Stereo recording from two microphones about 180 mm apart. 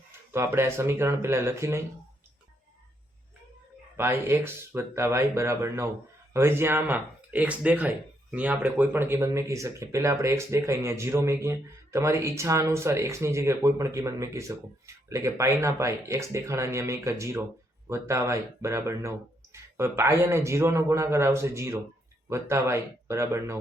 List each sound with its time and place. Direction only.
0.3 s speech: 15° right (ahead or behind)
3.9 s speech: 15° right (ahead or behind)